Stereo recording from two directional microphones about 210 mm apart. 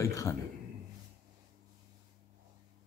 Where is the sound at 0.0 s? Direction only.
15° left (ahead or behind).